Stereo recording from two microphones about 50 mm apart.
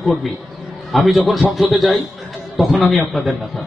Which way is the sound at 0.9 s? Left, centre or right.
Centre.